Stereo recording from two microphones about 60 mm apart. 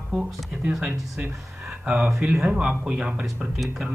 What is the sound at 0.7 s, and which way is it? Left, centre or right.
Speech, centre.